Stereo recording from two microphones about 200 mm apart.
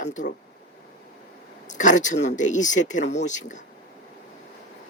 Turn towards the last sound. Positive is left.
turn(degrees=40)  # may be behind; listen again after turning